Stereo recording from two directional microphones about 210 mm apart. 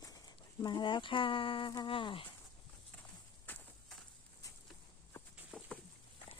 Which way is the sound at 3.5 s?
10° left (ahead or behind).